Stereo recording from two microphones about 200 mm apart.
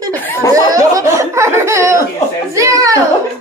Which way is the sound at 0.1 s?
10° left (ahead or behind).